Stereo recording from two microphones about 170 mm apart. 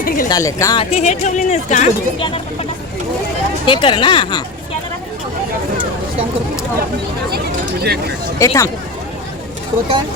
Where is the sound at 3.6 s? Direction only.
30° left (ahead or behind).